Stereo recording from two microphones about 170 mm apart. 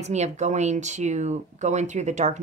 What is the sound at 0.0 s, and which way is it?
Speech, 40° right (ahead or behind).